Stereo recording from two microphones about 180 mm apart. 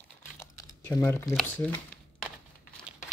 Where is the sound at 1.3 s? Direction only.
10° left (ahead or behind).